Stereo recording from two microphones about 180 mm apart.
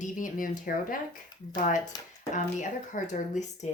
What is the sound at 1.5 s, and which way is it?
A woman's voice, 45° left (ahead or behind).